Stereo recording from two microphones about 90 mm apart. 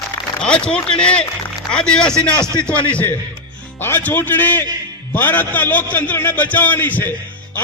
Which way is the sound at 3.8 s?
20° left (ahead or behind).